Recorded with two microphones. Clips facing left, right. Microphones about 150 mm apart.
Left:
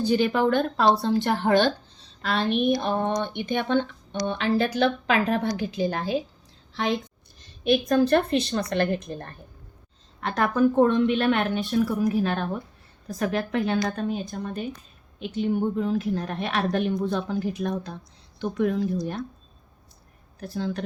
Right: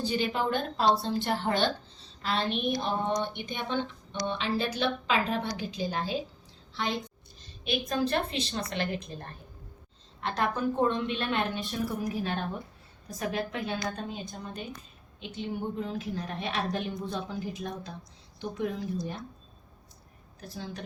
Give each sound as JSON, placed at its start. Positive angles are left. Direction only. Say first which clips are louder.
{"t": 0.1, "sound": "a woman's voice", "louder": "left 9 dB", "side_deg": 55}
{"t": 7.6, "sound": "a woman's voice", "louder": "left 9 dB", "side_deg": 55}
{"t": 20.4, "sound": "speech", "louder": "left 10 dB", "side_deg": 75}